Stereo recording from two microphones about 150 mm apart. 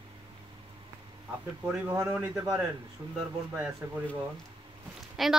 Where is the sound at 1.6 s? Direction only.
15° right (ahead or behind).